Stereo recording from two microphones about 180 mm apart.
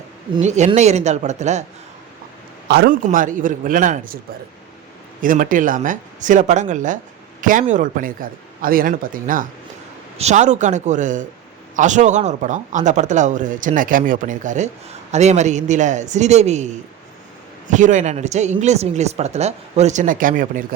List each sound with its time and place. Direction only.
0.4 s speech: 40° right (ahead or behind)
2.6 s a man's voice: 65° right (ahead or behind)
2.9 s speech: 50° right (ahead or behind)
5.2 s speech: 50° right (ahead or behind)